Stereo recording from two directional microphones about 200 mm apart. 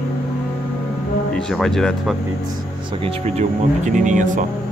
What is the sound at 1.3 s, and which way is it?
Speech, 5° left (ahead or behind).